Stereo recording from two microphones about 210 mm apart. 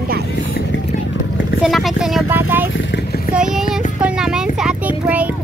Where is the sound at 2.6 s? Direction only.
65° left (ahead or behind).